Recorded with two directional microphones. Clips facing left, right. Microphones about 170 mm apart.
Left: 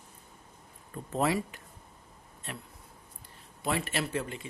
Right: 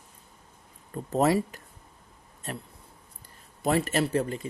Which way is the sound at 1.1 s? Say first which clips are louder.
Right 5 dB; 40° right (ahead or behind).